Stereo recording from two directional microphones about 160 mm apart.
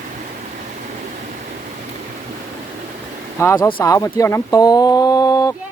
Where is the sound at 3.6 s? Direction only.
30° left (ahead or behind).